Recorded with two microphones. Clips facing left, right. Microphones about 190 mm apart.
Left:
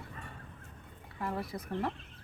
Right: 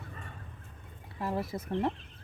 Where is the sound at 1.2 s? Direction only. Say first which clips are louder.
Right 3 dB; 25° right (ahead or behind).